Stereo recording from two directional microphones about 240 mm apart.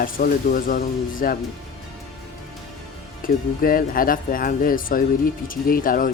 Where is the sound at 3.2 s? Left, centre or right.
Left.